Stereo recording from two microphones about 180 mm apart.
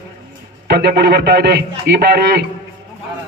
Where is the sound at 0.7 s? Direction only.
60° right (ahead or behind).